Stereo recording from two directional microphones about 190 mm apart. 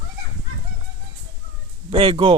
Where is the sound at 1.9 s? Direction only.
25° right (ahead or behind).